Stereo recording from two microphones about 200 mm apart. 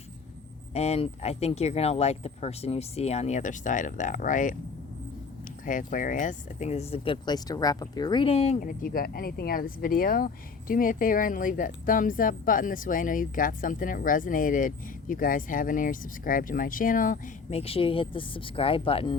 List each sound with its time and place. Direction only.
0.7 s speech: 30° left (ahead or behind)
5.6 s speech: 40° left (ahead or behind)
8.6 s speech: 45° left (ahead or behind)
17.6 s speech: 30° left (ahead or behind)